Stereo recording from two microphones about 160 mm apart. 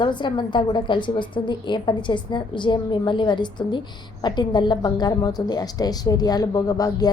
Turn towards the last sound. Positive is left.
turn(degrees=25)  # may be behind; listen again after turning